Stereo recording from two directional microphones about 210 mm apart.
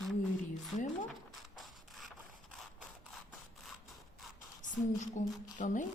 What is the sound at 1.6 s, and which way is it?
Printer, centre (ahead or behind).